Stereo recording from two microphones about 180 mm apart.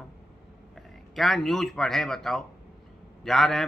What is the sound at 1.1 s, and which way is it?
A man's voice, centre (ahead or behind).